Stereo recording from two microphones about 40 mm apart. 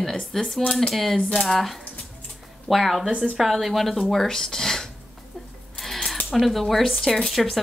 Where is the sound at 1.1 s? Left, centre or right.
Centre.